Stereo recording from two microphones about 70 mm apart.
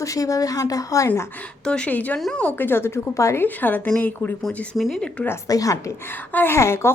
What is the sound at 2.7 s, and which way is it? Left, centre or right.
Speech, left.